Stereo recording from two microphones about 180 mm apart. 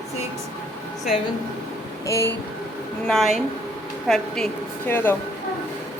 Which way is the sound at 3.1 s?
Centre (ahead or behind).